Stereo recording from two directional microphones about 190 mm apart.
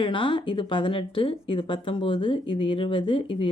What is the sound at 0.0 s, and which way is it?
A woman's voice, 25° left (ahead or behind).